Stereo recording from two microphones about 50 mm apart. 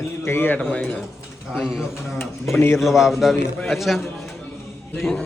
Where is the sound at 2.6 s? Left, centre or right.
Left.